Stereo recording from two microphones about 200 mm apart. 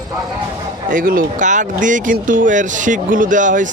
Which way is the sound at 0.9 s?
45° right (ahead or behind).